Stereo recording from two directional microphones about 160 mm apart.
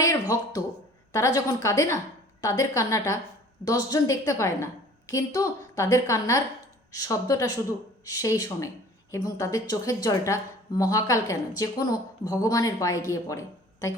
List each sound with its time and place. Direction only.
0.0 s a woman's voice: 20° left (ahead or behind)